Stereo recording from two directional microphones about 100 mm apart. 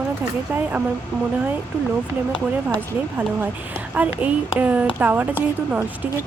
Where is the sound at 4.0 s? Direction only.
15° right (ahead or behind).